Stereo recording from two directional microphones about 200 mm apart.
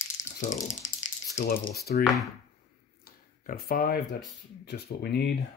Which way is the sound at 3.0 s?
45° left (ahead or behind).